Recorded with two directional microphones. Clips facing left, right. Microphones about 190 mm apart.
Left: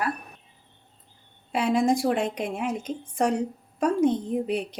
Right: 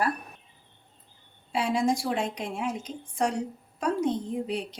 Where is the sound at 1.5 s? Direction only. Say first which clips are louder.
Left 3 dB; 55° left (ahead or behind).